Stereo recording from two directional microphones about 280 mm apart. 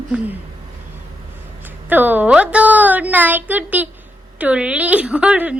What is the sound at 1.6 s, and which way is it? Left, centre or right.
A woman's voice, centre.